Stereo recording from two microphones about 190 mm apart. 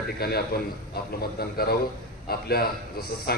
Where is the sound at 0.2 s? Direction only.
55° left (ahead or behind).